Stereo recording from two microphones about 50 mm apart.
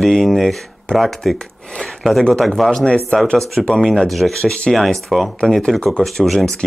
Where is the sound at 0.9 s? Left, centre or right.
Centre.